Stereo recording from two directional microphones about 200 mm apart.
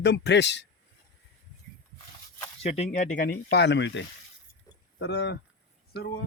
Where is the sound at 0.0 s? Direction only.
60° left (ahead or behind).